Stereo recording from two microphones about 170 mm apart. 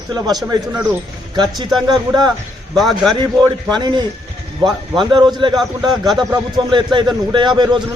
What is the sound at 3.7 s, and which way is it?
A man's voice, 25° right (ahead or behind).